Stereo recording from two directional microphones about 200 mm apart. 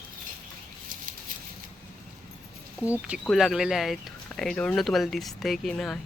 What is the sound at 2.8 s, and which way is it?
Speech, 5° right (ahead or behind).